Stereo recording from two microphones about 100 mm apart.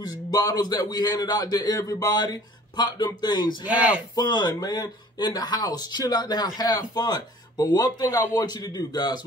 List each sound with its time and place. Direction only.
0.3 s speech: 40° left (ahead or behind)
3.6 s speech: 10° right (ahead or behind)
4.1 s speech: 45° left (ahead or behind)